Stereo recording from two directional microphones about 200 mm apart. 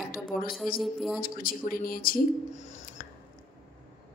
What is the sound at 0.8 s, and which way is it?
Speech, centre (ahead or behind).